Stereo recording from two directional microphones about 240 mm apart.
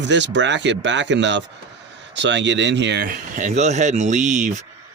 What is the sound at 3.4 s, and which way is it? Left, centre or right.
Speech, right.